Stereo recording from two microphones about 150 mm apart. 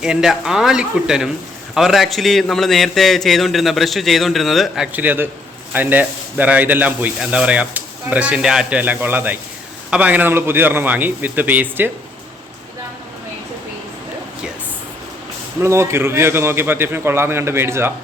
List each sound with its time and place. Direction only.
0.0 s a man's voice: 5° right (ahead or behind)
15.6 s a man's voice: 15° right (ahead or behind)